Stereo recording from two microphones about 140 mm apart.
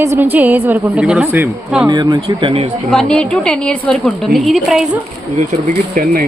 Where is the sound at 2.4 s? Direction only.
45° right (ahead or behind).